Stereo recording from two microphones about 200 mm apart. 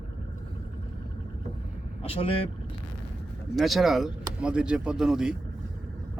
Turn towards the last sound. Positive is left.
turn(degrees=-5)  # may be behind; listen again after turning